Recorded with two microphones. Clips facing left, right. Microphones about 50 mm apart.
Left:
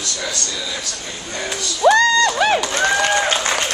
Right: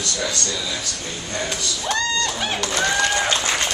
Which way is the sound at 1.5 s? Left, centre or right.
Centre.